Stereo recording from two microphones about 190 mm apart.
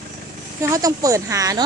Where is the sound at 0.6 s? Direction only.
15° right (ahead or behind).